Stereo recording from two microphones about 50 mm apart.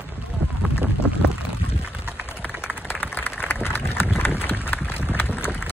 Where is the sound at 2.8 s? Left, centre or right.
Left.